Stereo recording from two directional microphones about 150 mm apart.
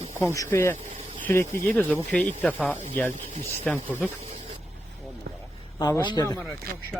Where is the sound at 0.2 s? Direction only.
20° left (ahead or behind).